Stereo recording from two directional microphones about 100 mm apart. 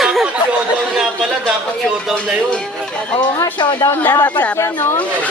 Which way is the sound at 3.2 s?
50° left (ahead or behind).